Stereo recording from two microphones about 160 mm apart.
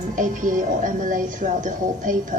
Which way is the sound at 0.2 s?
55° right (ahead or behind).